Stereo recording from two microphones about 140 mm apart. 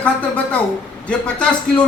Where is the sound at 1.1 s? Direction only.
5° left (ahead or behind).